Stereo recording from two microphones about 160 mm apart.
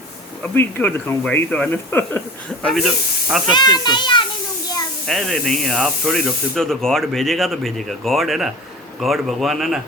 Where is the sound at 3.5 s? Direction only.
25° left (ahead or behind).